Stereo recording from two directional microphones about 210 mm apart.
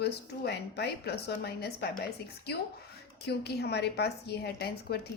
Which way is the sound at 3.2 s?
50° left (ahead or behind).